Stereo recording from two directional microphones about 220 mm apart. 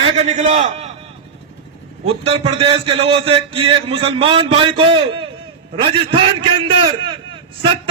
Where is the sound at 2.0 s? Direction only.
25° right (ahead or behind).